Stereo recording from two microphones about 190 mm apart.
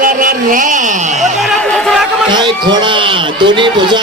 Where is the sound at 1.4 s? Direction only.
5° left (ahead or behind).